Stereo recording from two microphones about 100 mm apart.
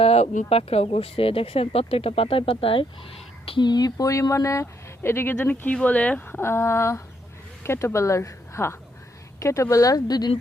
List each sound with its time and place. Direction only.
0.0 s speech: 90° left; by 3.7 s 65° left (ahead or behind)
3.7 s speech: 40° left (ahead or behind)